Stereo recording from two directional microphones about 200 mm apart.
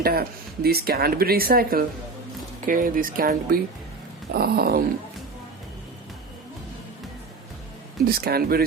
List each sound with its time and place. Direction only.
0.0 s speech: 50° right (ahead or behind)
8.0 s speech: 50° right (ahead or behind)